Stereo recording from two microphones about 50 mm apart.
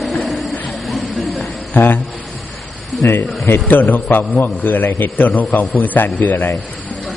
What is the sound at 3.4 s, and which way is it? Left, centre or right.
A man's voice, left.